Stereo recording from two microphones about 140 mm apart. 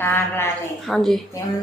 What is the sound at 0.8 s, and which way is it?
Speech, centre (ahead or behind).